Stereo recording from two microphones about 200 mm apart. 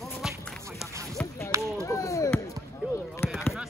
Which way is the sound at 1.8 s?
15° left (ahead or behind).